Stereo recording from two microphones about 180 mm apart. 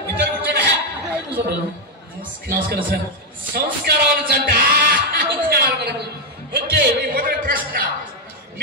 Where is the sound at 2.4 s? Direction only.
55° right (ahead or behind).